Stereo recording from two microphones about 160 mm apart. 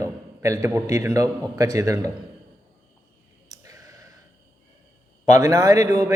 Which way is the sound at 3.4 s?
20° right (ahead or behind).